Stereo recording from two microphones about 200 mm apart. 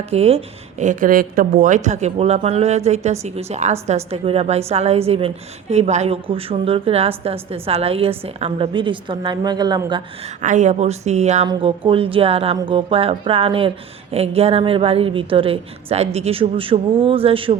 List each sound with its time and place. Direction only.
0.1 s speech: 30° right (ahead or behind)
10.4 s speech: 40° right (ahead or behind)